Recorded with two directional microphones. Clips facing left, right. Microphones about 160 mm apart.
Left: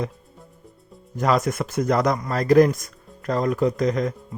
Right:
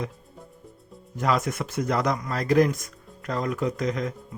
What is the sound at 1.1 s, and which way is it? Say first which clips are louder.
Speech: left 4 dB; 40° left (ahead or behind).